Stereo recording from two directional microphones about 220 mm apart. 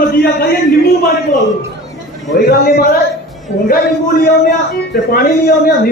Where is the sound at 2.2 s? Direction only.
45° left (ahead or behind).